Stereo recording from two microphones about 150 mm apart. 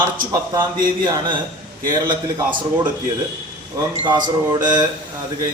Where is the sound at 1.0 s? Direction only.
30° right (ahead or behind).